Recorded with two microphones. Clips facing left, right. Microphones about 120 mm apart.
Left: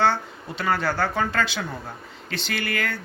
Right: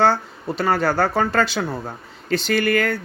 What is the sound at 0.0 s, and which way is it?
Speech, 40° right (ahead or behind).